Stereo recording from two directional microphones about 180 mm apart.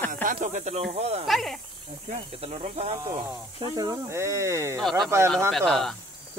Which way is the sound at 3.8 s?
15° right (ahead or behind).